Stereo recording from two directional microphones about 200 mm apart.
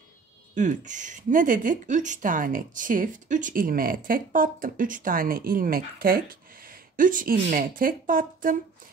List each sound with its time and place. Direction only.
0.6 s speech: 40° right (ahead or behind)